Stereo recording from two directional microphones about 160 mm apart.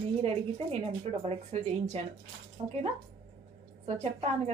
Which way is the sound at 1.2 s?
40° right (ahead or behind).